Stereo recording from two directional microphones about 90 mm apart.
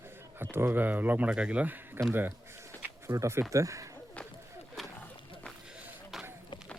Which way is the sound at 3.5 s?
35° right (ahead or behind).